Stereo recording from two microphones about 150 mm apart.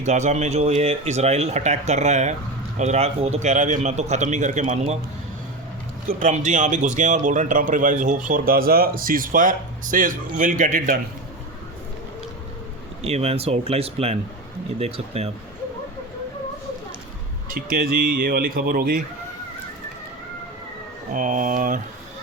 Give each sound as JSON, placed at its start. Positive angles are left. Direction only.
{"t": 0.0, "sound": "speech", "side_deg": -50}
{"t": 6.1, "sound": "speech", "side_deg": -55}
{"t": 8.3, "sound": "speech", "side_deg": -75}
{"t": 13.0, "sound": "speech", "side_deg": -45}
{"t": 17.5, "sound": "speech", "side_deg": -80}
{"t": 21.1, "sound": "speech", "side_deg": -60}